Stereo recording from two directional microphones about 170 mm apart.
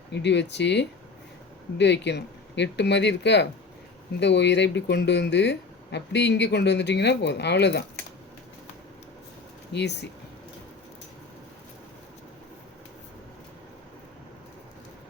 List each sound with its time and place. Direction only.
0.1 s speech: 90° left
9.7 s speech: 80° left